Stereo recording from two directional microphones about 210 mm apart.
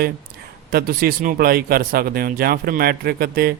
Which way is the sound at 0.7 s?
45° right (ahead or behind).